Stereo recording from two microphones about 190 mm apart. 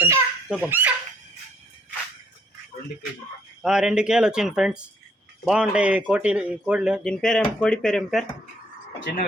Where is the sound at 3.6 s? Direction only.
5° right (ahead or behind).